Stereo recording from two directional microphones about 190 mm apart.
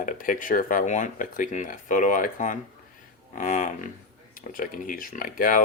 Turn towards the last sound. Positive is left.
turn(degrees=45)  # may be behind; listen again after turning